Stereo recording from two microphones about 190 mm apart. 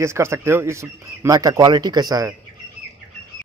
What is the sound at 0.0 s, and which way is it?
Speech, 15° right (ahead or behind).